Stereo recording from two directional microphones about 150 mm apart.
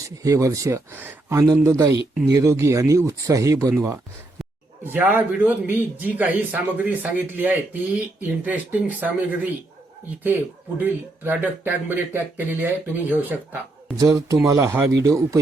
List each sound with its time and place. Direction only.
0.2 s speech: 20° right (ahead or behind)
10.8 s speech: 10° right (ahead or behind)